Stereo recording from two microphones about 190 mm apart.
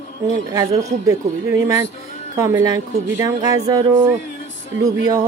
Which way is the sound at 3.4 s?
20° right (ahead or behind).